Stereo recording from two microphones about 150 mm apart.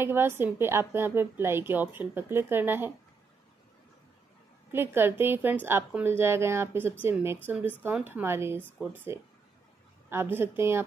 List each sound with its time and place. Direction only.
0.0 s a woman's voice: 15° right (ahead or behind)
4.7 s a woman's voice: 15° right (ahead or behind)